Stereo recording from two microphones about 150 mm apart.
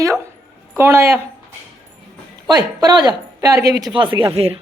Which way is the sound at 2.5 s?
25° right (ahead or behind).